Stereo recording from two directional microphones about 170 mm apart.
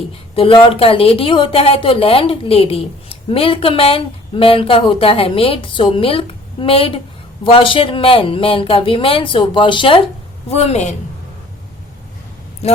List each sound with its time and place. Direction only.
0.3 s a woman's voice: 30° left (ahead or behind)